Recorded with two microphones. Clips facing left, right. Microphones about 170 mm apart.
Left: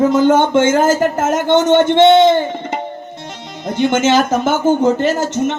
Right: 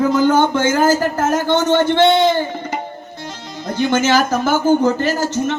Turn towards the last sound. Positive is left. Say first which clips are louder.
# left 2 dB
turn(degrees=20)  # may be behind; listen again after turning